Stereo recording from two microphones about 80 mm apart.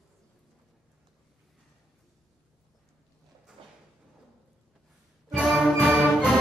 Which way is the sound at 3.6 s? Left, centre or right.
Right.